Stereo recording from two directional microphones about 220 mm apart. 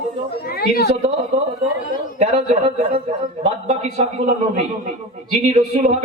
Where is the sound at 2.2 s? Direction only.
30° right (ahead or behind).